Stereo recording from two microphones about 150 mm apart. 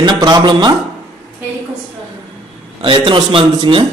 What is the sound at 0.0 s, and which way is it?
Speech, 30° right (ahead or behind).